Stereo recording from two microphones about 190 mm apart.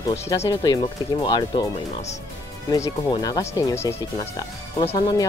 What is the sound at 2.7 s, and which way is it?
Speech, 20° left (ahead or behind).